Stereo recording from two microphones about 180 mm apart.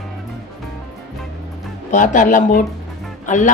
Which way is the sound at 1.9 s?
45° left (ahead or behind).